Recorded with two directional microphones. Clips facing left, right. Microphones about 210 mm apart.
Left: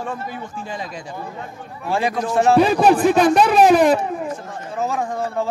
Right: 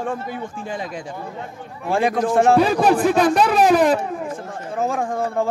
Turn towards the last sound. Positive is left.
turn(degrees=-50)  # may be behind; listen again after turning